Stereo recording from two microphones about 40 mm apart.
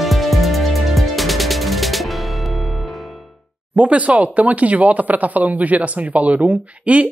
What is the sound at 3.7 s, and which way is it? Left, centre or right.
Speech, right.